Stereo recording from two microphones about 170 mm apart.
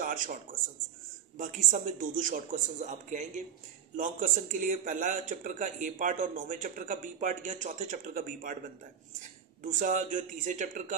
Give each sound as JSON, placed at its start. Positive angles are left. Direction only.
{"t": 0.0, "sound": "a man's voice", "side_deg": -50}
{"t": 9.6, "sound": "a man's voice", "side_deg": -50}